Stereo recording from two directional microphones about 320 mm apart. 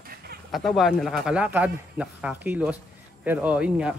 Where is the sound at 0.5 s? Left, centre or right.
Centre.